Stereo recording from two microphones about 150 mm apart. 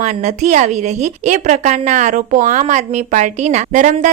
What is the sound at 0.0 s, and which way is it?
A woman's voice, 50° right (ahead or behind).